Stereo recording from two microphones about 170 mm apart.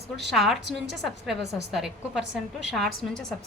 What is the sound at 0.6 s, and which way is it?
Speech, 90° right.